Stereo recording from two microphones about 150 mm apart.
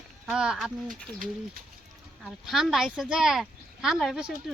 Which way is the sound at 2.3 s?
Centre (ahead or behind).